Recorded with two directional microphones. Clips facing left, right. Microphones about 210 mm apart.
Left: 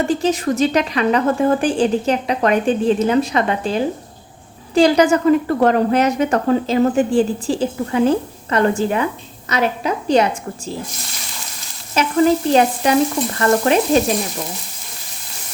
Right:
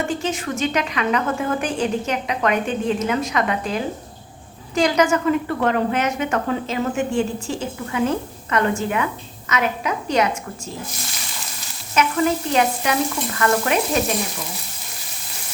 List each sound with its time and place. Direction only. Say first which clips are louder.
0.1 s a woman's voice: left 7 dB; 35° left (ahead or behind)
11.9 s a woman's voice: left 5 dB; 35° left (ahead or behind)